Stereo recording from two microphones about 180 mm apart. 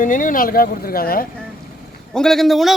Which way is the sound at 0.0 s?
50° left (ahead or behind).